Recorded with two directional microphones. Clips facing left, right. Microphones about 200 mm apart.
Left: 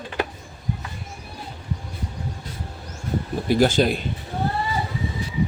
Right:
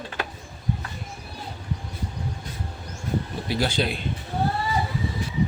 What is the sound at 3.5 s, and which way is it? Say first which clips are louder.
Speech: left 8 dB; 45° left (ahead or behind).